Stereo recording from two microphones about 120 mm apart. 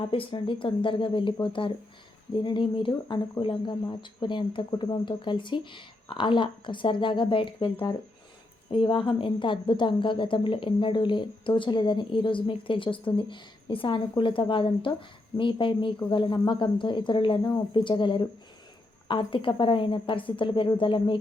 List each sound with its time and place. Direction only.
0.0 s a woman's voice: 50° left (ahead or behind)